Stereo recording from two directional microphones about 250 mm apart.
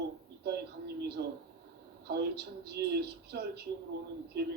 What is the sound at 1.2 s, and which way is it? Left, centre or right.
Speech, right.